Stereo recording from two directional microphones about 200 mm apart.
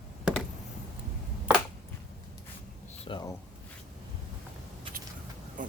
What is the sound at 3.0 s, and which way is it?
Speech, 20° left (ahead or behind).